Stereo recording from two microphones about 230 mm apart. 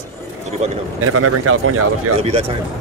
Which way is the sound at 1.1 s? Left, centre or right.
Right.